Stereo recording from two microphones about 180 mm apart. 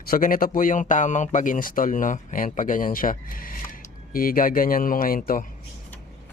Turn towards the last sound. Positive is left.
turn(degrees=50)  # may be behind; listen again after turning